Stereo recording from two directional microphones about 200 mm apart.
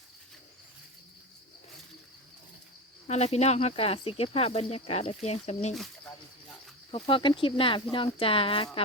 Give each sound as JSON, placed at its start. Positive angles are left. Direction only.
{"t": 3.1, "sound": "speech", "side_deg": 35}
{"t": 6.9, "sound": "speech", "side_deg": 25}